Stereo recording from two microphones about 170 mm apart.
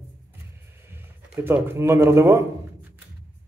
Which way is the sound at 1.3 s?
10° right (ahead or behind).